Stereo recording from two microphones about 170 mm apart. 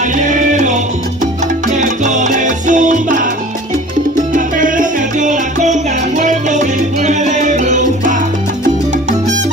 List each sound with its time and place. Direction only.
0.2 s music: 45° right (ahead or behind)
1.2 s salsa music: 45° right (ahead or behind)
4.3 s music: 50° right (ahead or behind)